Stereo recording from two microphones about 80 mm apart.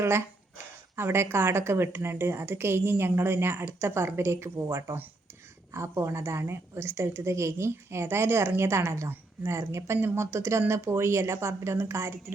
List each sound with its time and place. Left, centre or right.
0.0 s a woman's voice: right